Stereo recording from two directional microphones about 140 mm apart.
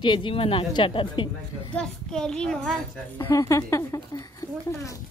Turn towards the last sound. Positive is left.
turn(degrees=25)  # may be behind; listen again after turning